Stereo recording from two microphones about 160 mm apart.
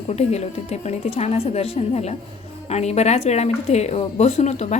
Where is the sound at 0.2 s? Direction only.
40° left (ahead or behind).